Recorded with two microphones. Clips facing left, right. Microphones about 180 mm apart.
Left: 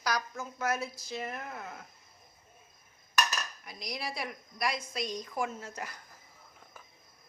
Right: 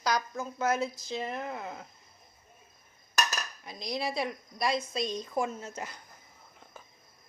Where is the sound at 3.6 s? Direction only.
25° right (ahead or behind).